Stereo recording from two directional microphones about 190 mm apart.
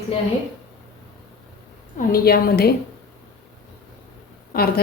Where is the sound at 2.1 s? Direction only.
55° left (ahead or behind).